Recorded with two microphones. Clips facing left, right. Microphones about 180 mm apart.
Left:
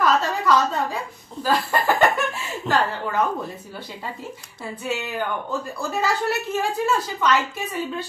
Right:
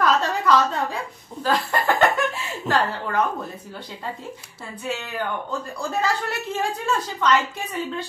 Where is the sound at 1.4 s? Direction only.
5° left (ahead or behind).